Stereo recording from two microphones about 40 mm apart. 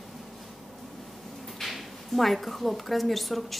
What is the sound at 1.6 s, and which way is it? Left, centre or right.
A woman's voice, centre.